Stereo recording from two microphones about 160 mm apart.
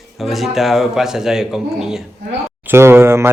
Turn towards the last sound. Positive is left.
turn(degrees=-15)  # may be behind; listen again after turning